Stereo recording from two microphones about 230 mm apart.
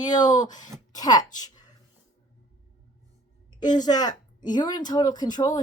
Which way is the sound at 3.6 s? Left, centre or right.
Centre.